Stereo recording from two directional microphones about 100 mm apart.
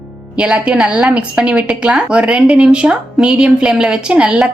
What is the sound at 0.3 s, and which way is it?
A woman's voice, 10° right (ahead or behind).